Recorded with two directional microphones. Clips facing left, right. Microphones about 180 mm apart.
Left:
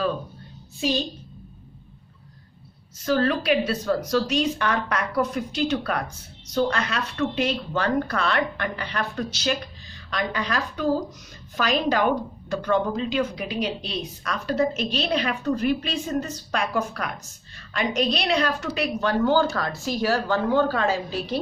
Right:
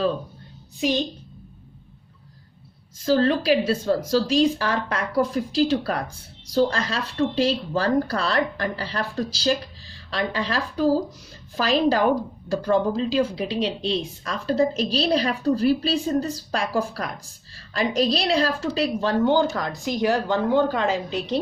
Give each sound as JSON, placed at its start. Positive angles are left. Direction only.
{"t": 0.7, "sound": "a child's voice", "side_deg": -15}
{"t": 3.1, "sound": "a woman's voice", "side_deg": -30}